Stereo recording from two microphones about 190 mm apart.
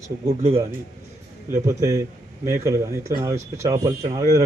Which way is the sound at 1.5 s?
15° right (ahead or behind).